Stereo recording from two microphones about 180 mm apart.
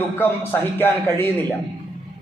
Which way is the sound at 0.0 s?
10° left (ahead or behind).